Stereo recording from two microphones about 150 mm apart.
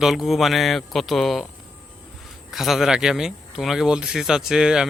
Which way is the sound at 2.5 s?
Centre (ahead or behind).